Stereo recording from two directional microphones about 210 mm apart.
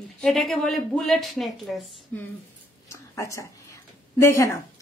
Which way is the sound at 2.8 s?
15° left (ahead or behind).